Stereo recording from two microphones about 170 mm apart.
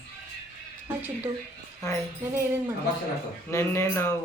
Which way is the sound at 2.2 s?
10° right (ahead or behind).